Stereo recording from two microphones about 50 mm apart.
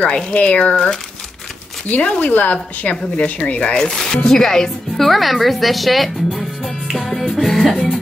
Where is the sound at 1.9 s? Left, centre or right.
Left.